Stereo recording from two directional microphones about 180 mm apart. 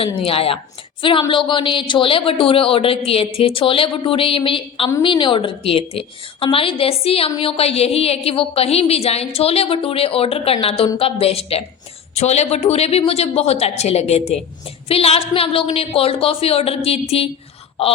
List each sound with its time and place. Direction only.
0.0 s a woman's voice: 30° left (ahead or behind)